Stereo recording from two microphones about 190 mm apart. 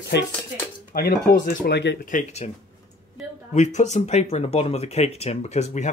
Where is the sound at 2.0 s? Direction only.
40° left (ahead or behind).